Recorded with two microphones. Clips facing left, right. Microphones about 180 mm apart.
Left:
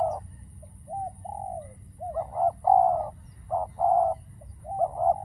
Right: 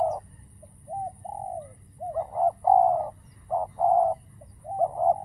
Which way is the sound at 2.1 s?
5° right (ahead or behind).